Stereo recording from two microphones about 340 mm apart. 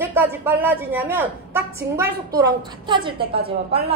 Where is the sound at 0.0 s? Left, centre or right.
Centre.